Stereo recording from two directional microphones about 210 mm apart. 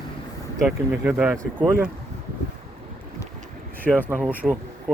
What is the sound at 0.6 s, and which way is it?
Speech, centre (ahead or behind).